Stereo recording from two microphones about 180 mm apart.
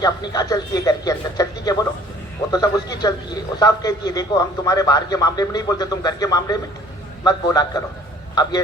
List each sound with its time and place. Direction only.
0.0 s a man's voice: 20° left (ahead or behind)